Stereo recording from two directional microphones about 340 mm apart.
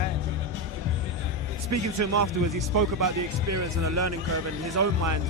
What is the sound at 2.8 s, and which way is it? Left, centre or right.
Speech, right.